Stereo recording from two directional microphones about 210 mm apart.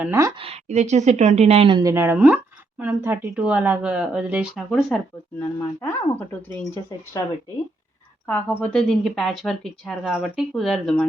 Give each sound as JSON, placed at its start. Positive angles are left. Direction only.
{"t": 0.0, "sound": "a woman's voice", "side_deg": -15}
{"t": 0.4, "sound": "a woman's voice", "side_deg": -30}
{"t": 8.3, "sound": "speech", "side_deg": 5}